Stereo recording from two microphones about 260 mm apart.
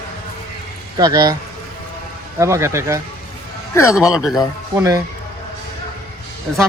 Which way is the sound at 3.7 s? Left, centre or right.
Centre.